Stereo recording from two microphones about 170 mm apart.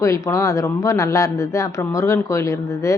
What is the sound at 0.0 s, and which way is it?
A woman's voice, 20° left (ahead or behind).